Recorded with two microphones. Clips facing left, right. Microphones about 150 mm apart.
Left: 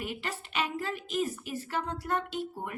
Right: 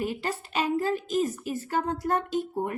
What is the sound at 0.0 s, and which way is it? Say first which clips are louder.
A woman's voice: right 7 dB; 35° right (ahead or behind).